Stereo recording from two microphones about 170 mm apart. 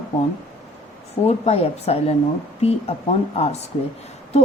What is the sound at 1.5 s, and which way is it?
Speech, 40° left (ahead or behind).